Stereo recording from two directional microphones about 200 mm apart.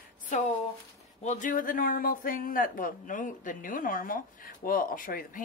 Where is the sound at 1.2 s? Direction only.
40° left (ahead or behind).